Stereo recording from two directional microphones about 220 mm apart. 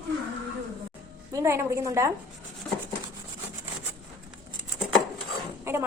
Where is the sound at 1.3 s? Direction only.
10° right (ahead or behind).